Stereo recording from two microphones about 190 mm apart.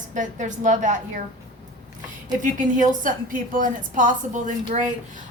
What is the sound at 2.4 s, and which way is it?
A woman's voice, 40° right (ahead or behind).